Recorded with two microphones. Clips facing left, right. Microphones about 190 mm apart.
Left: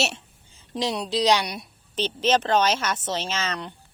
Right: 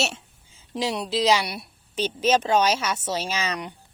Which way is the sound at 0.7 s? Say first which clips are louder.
Even; 5° right (ahead or behind).